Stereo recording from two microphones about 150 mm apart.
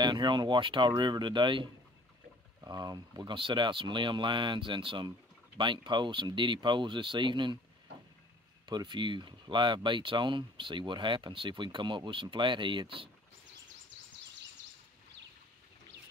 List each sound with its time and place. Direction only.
0.0 s speech: 30° right (ahead or behind)
8.6 s speech: 30° right (ahead or behind)